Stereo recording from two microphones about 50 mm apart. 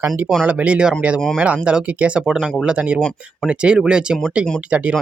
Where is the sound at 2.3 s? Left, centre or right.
Centre.